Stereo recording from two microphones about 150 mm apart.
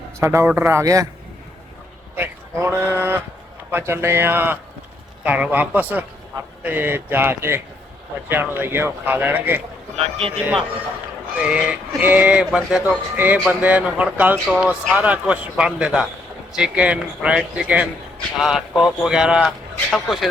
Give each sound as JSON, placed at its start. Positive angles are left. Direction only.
{"t": 0.2, "sound": "speech", "side_deg": -15}
{"t": 2.1, "sound": "speech", "side_deg": -15}
{"t": 10.0, "sound": "speech", "side_deg": -40}
{"t": 11.3, "sound": "speech", "side_deg": -5}